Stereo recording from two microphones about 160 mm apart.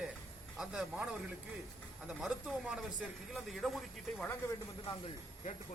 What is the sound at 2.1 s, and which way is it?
A man's voice, 5° right (ahead or behind).